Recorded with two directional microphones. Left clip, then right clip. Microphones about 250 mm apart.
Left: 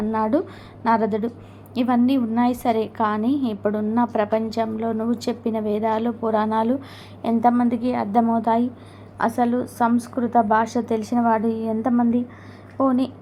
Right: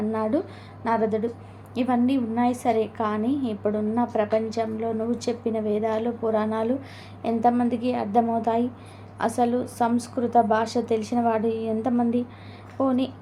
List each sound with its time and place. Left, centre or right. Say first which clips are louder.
0.1 s a woman's voice: left 6 dB; centre